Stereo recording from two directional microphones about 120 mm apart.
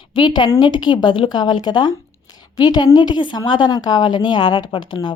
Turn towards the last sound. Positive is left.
turn(degrees=40)  # may be behind; listen again after turning